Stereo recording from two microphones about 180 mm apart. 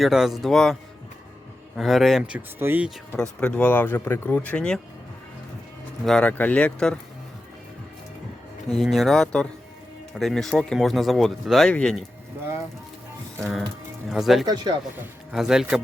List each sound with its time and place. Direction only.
0.0 s speech: centre (ahead or behind)
3.1 s speech: 5° left (ahead or behind)
6.1 s speech: 5° left (ahead or behind)
8.7 s speech: centre (ahead or behind)
14.1 s speech: centre (ahead or behind)
14.4 s speech: 25° right (ahead or behind)
15.3 s speech: 5° right (ahead or behind)